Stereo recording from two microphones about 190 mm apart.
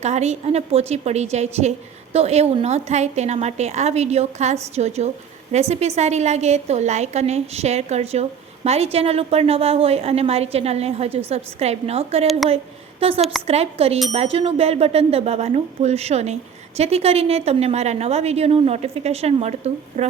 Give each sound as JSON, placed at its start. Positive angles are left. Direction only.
{"t": 0.0, "sound": "a woman's voice", "side_deg": -35}